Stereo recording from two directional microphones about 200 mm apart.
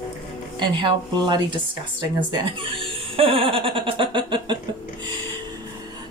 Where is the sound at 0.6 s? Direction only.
25° right (ahead or behind).